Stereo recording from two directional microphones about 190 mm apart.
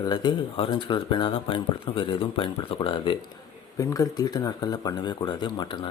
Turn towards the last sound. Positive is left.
turn(degrees=20)  # may be behind; listen again after turning